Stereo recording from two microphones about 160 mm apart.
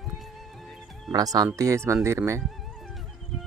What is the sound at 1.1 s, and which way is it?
Speech, 25° right (ahead or behind).